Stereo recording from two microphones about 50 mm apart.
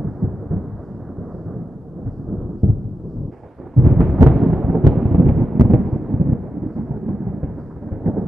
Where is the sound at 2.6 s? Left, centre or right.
Centre.